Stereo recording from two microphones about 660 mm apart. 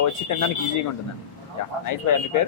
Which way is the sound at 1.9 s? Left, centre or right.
Left.